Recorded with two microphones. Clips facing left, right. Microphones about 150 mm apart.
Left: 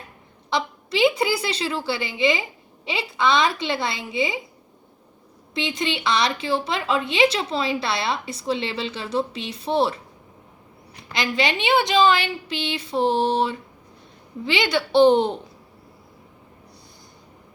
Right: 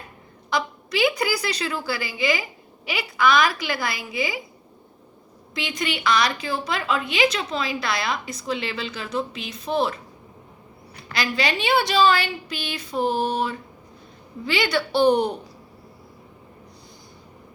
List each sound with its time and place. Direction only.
0.5 s a woman's voice: 25° left (ahead or behind)
5.5 s a woman's voice: 25° left (ahead or behind)
11.1 s a woman's voice: 20° left (ahead or behind)